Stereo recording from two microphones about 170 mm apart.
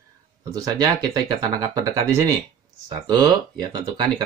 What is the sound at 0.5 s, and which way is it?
Speech, 20° right (ahead or behind).